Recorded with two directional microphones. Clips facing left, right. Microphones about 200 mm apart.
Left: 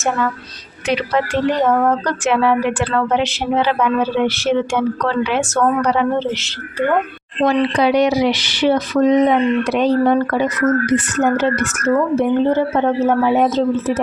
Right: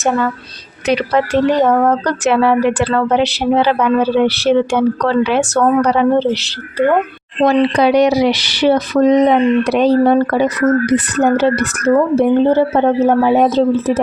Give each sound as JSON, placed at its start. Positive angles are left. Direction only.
{"t": 0.9, "sound": "speech", "side_deg": -40}